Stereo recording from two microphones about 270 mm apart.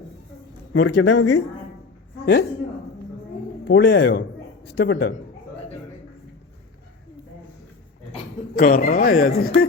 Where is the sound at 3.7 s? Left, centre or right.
Left.